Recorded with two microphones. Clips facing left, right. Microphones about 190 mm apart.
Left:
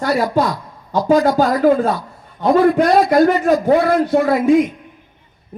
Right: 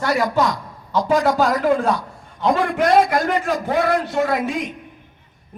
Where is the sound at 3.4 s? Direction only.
40° left (ahead or behind).